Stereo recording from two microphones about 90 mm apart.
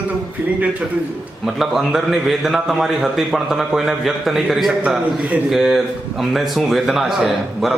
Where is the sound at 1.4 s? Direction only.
5° right (ahead or behind).